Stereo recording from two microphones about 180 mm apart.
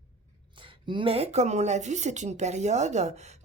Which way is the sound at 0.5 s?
30° right (ahead or behind).